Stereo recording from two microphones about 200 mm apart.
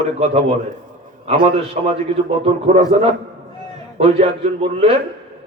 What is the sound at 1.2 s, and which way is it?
A man's voice, 30° right (ahead or behind).